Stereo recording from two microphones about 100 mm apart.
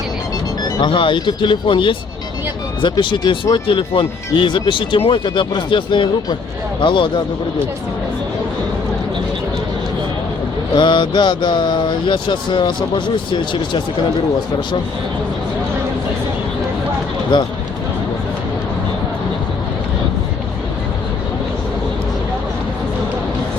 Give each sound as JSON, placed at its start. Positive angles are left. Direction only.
{"t": 0.8, "sound": "speech", "side_deg": 55}
{"t": 10.8, "sound": "speech", "side_deg": 50}